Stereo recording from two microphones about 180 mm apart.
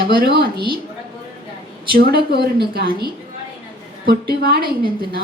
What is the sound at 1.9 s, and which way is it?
A woman's voice, 60° right (ahead or behind).